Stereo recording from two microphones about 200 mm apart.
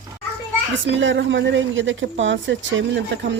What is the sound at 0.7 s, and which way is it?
A woman's voice, 65° right (ahead or behind).